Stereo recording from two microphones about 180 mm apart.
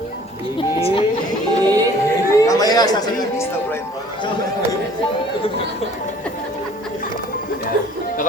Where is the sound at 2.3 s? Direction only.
20° left (ahead or behind).